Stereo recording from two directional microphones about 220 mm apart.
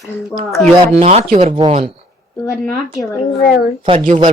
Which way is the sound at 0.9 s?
30° right (ahead or behind).